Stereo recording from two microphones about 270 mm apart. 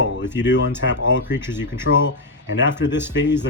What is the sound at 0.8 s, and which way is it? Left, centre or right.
Speech, left.